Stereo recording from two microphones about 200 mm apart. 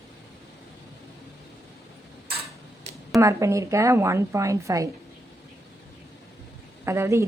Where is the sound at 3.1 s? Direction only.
15° right (ahead or behind).